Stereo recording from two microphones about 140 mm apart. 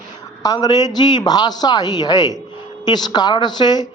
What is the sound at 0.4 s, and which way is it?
A woman's voice, 25° left (ahead or behind).